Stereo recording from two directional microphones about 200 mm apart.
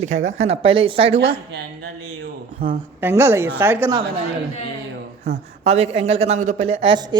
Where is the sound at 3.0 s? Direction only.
10° right (ahead or behind).